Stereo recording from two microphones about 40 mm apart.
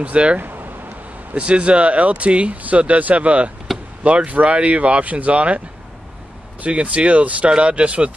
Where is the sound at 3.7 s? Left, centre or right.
Centre.